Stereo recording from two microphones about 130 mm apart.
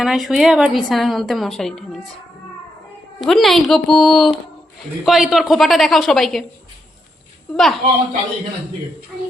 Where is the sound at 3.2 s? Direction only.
Centre (ahead or behind).